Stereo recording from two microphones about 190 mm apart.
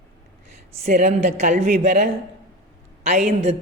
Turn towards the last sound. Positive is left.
turn(degrees=-40)  # may be behind; listen again after turning